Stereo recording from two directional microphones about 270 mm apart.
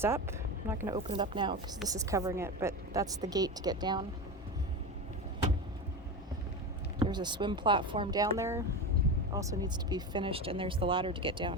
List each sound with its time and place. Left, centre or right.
0.0 s speech: centre
0.9 s speech: centre
7.0 s speech: centre